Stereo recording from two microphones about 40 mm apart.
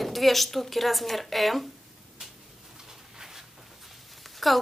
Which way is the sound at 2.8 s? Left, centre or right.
Centre.